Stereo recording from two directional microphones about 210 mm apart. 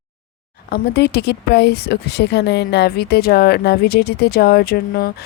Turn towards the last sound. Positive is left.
turn(degrees=45)  # may be behind; listen again after turning